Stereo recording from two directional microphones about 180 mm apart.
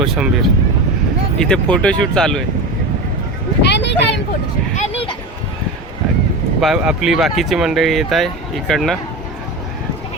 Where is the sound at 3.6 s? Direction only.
75° left (ahead or behind).